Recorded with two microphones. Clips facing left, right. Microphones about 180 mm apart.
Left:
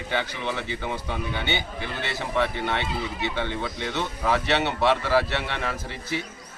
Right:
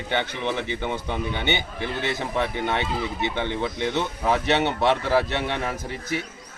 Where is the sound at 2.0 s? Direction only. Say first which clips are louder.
Left 1 dB; 15° right (ahead or behind).